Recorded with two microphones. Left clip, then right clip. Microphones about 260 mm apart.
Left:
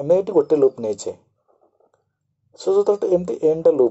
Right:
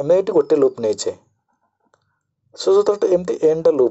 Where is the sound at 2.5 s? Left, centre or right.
Right.